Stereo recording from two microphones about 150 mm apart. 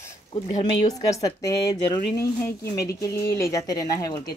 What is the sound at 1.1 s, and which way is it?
Speech, 25° left (ahead or behind).